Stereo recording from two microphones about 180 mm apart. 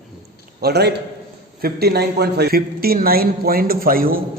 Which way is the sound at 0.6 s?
65° right (ahead or behind).